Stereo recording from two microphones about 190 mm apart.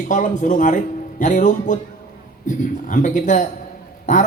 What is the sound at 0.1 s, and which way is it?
A man's voice, 40° left (ahead or behind).